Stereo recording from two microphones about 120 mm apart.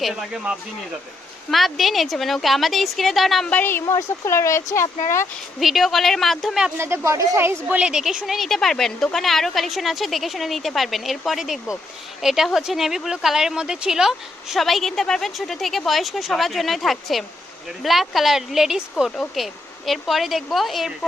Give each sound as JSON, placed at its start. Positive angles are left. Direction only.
{"t": 0.0, "sound": "speech", "side_deg": 0}
{"t": 3.5, "sound": "speech", "side_deg": 15}
{"t": 5.5, "sound": "speech", "side_deg": 0}
{"t": 6.7, "sound": "speech", "side_deg": -20}